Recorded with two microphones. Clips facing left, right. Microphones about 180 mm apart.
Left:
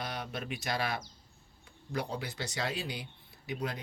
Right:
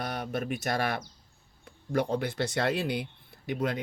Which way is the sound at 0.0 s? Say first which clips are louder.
Right 6 dB; 55° right (ahead or behind).